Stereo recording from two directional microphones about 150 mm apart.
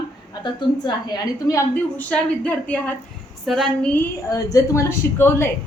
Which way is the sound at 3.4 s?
Centre (ahead or behind).